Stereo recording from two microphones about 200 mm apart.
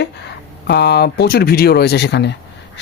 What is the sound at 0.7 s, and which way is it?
A man's voice, 55° left (ahead or behind).